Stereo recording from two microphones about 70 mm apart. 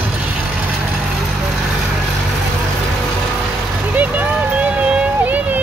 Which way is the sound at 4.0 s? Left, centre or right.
Right.